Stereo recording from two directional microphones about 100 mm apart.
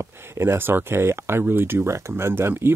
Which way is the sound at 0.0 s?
25° right (ahead or behind).